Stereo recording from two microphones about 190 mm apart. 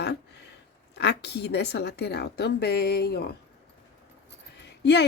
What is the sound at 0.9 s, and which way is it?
A woman's voice, 60° left (ahead or behind).